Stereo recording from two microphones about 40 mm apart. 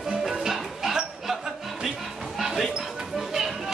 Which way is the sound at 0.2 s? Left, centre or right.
Centre.